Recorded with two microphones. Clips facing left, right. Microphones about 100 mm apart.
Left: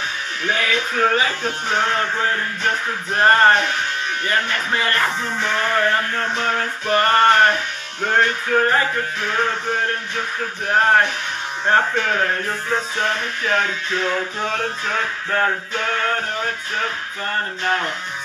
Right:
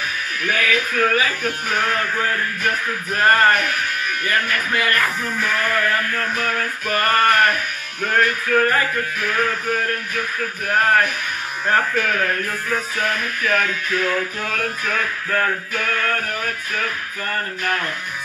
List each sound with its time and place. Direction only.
0.4 s speech: 25° left (ahead or behind)